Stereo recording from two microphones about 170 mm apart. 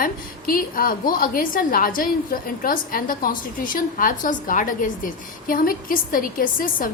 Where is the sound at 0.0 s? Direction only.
55° left (ahead or behind).